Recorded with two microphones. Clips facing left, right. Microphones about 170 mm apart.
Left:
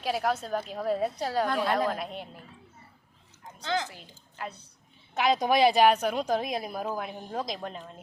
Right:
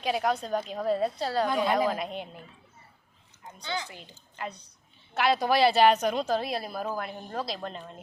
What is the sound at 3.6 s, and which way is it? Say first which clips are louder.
Speech: left 4 dB; 90° left.